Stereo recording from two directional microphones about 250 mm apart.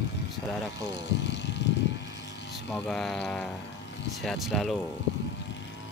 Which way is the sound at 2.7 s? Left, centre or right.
Centre.